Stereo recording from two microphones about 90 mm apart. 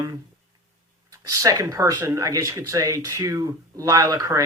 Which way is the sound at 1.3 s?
40° right (ahead or behind).